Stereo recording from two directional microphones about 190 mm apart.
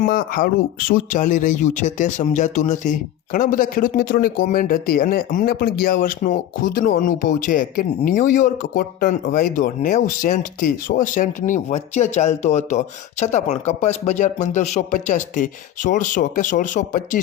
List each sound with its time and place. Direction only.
0.0 s speech: 45° left (ahead or behind)